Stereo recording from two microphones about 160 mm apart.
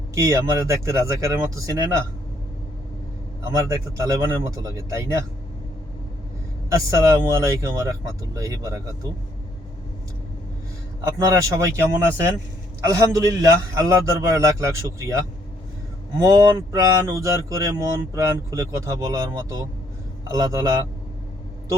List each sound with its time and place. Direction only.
0.1 s speech: 20° right (ahead or behind)
3.5 s speech: 20° right (ahead or behind)
6.9 s speech: 20° right (ahead or behind)
11.0 s speech: 20° right (ahead or behind)
16.1 s speech: 25° right (ahead or behind)